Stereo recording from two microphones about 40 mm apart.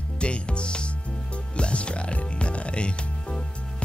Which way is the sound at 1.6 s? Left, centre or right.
Left.